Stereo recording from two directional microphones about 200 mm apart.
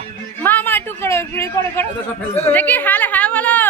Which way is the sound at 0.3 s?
10° left (ahead or behind).